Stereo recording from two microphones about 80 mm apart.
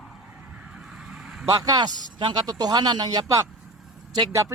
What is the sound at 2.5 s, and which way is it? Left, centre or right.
Speech, right.